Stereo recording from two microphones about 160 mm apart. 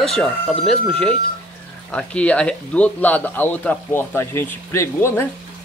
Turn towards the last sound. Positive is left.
turn(degrees=15)  # may be behind; listen again after turning